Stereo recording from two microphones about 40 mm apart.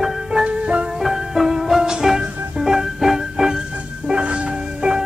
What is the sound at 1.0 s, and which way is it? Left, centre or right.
Music, centre.